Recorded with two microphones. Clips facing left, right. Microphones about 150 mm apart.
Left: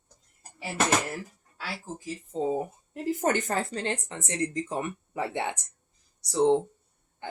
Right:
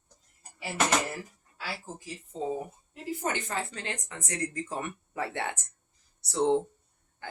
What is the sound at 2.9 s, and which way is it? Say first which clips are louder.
Speech: left 6 dB; 45° left (ahead or behind).